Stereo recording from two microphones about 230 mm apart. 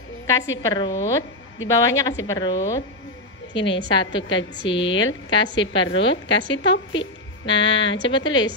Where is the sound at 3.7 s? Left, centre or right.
Left.